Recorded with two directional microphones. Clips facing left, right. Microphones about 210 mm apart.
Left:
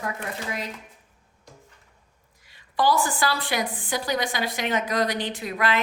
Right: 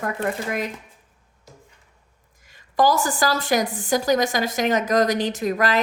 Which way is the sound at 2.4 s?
45° right (ahead or behind).